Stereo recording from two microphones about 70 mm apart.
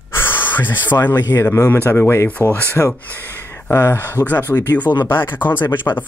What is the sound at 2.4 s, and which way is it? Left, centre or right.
Speech, left.